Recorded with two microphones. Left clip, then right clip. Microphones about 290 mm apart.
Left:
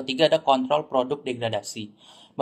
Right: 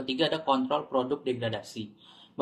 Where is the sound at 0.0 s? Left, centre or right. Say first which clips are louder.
Left 8 dB; centre.